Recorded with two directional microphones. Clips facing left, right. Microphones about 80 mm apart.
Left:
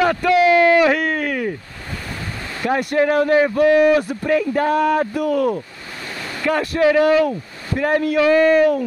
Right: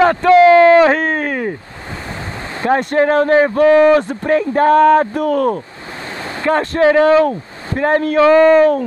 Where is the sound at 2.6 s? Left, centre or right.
Right.